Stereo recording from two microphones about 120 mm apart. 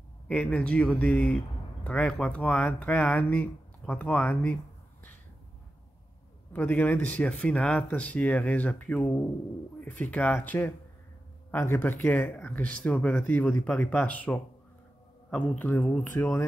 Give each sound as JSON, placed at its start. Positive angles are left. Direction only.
{"t": 0.3, "sound": "speech", "side_deg": 10}
{"t": 6.5, "sound": "speech", "side_deg": 15}
{"t": 9.8, "sound": "bird", "side_deg": 15}
{"t": 10.1, "sound": "speech", "side_deg": 15}